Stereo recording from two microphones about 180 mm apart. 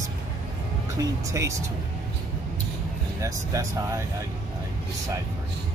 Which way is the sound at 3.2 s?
15° right (ahead or behind).